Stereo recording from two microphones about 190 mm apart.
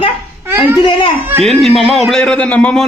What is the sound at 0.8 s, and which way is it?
Speech, 25° left (ahead or behind).